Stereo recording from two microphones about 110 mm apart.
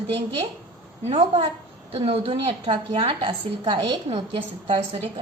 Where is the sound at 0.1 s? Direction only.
60° right (ahead or behind).